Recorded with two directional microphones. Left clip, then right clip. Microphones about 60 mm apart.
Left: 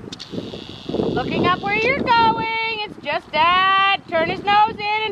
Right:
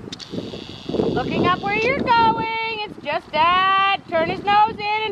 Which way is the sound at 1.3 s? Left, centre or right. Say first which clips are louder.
Left 2 dB; centre.